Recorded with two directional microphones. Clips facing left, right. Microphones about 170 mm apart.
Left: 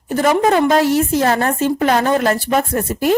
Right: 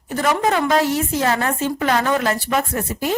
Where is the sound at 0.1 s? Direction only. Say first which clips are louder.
Left 5 dB; 35° left (ahead or behind); by 3.2 s 55° left (ahead or behind).